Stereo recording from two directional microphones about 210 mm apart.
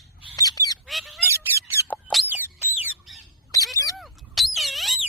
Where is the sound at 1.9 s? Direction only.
5° left (ahead or behind).